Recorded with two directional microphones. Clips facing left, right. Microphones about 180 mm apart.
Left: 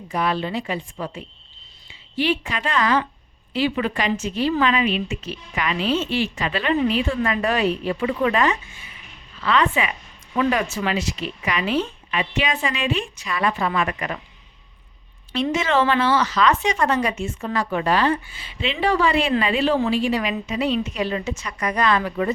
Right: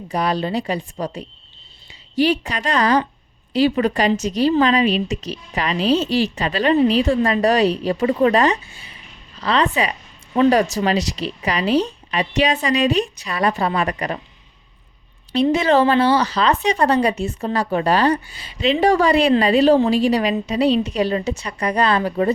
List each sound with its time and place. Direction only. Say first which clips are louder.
0.1 s a woman's voice: right 3 dB; 35° right (ahead or behind)
15.3 s a woman's voice: right 6 dB; 35° right (ahead or behind)